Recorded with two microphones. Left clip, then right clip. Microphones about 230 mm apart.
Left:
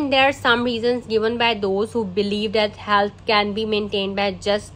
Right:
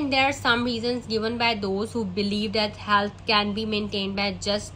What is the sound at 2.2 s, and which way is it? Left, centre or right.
Speech, centre.